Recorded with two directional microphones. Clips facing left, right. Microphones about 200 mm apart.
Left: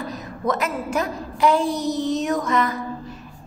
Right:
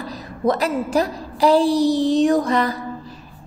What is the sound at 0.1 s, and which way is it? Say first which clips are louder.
A woman's voice: right 6 dB; 35° right (ahead or behind).